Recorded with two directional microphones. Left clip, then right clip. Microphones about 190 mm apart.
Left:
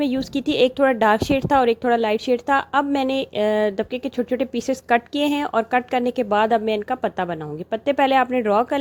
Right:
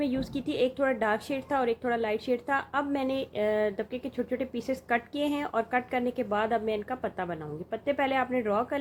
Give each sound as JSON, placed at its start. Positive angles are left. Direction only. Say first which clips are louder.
{"t": 0.0, "sound": "speech", "louder": "left 8 dB", "side_deg": 45}